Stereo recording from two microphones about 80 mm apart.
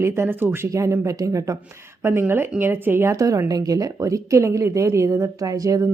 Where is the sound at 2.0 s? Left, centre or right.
Right.